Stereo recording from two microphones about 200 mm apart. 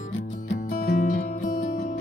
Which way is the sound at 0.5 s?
50° left (ahead or behind).